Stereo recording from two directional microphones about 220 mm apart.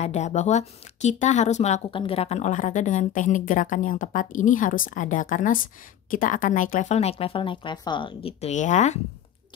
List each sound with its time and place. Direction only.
0.0 s speech: 30° left (ahead or behind)